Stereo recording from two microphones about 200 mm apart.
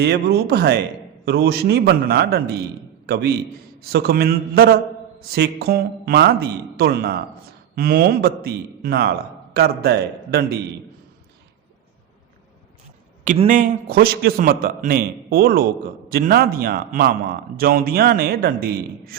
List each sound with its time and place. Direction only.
0.0 s a man's voice: 55° right (ahead or behind)
13.2 s a man's voice: 35° right (ahead or behind)